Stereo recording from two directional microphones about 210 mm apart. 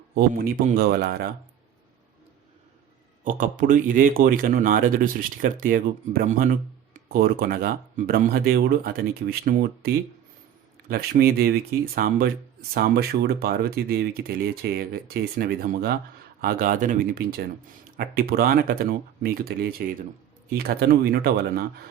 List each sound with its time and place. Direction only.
0.1 s speech: 45° right (ahead or behind)
3.2 s a man's voice: 40° right (ahead or behind)